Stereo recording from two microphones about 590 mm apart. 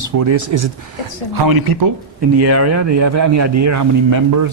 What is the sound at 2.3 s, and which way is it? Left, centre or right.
A man's voice, right.